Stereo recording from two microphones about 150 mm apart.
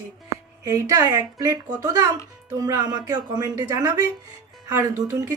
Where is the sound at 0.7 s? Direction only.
20° right (ahead or behind).